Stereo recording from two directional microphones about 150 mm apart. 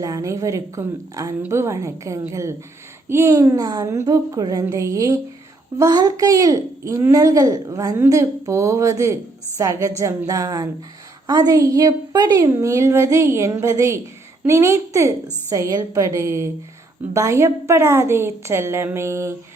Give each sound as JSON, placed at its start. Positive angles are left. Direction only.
{"t": 0.0, "sound": "a woman's voice", "side_deg": -20}